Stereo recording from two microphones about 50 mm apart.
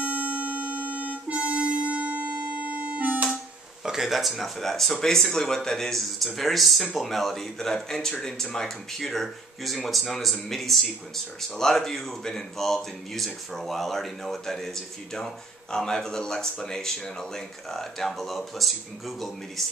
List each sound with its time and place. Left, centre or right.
0.0 s music: right
3.8 s speech: centre